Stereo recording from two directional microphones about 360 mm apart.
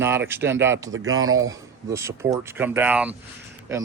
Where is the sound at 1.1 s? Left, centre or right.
Right.